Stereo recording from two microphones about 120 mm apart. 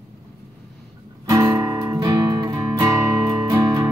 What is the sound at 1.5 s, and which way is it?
Music, 25° right (ahead or behind).